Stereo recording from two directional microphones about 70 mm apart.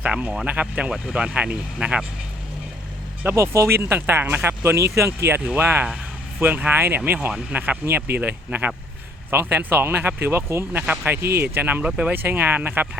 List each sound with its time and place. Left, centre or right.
0.0 s speech: centre
3.2 s speech: right
3.8 s speech: right
5.4 s speech: right
10.7 s speech: right
12.1 s speech: right